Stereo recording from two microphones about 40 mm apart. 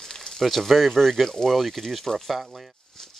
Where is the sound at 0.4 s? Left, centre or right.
Centre.